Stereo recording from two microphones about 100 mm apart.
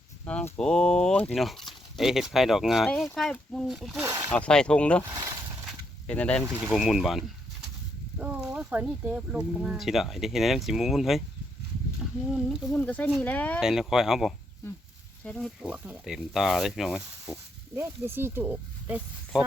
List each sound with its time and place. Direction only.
0.3 s speech: 10° left (ahead or behind)
4.4 s speech: 10° left (ahead or behind)
5.1 s a sound: 45° right (ahead or behind)
6.1 s speech: 10° left (ahead or behind)
6.5 s speech: 20° right (ahead or behind)
6.7 s speech: centre (ahead or behind)
8.7 s speech: 15° right (ahead or behind)
12.3 s speech: centre (ahead or behind)
12.7 s speech: 15° left (ahead or behind)
13.6 s speech: 5° right (ahead or behind)
15.2 s speech: 10° left (ahead or behind)
15.6 s speech: 15° right (ahead or behind)
16.1 s speech: centre (ahead or behind)
17.7 s speech: 25° right (ahead or behind)